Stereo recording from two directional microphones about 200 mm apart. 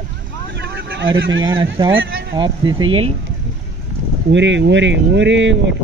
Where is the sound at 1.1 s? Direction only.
70° right (ahead or behind).